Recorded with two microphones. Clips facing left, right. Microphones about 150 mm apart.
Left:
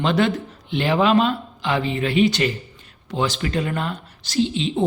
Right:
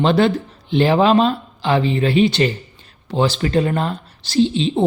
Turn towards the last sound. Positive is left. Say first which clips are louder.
# right 5 dB
turn(degrees=-30)  # may be behind; listen again after turning